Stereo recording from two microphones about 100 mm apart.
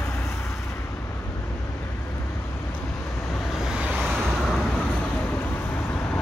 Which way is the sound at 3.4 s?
5° right (ahead or behind).